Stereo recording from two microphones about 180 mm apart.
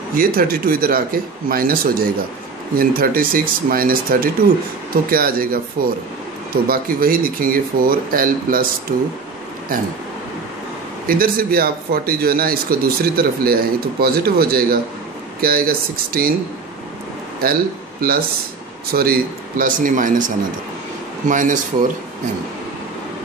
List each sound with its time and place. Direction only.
0.1 s speech: 55° right (ahead or behind)
11.1 s speech: 55° right (ahead or behind)
18.0 s speech: 55° right (ahead or behind)